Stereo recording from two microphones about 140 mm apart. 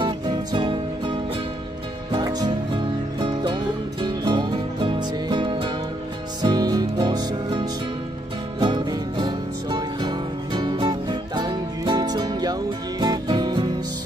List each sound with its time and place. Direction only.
0.0 s music: 35° right (ahead or behind)
2.1 s music: 30° right (ahead or behind)